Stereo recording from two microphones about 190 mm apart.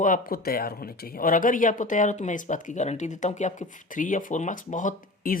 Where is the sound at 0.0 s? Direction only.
45° left (ahead or behind).